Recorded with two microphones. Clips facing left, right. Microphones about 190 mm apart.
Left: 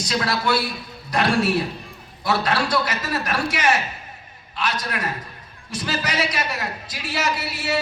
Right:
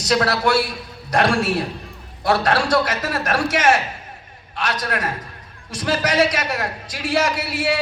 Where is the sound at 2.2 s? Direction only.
75° right (ahead or behind).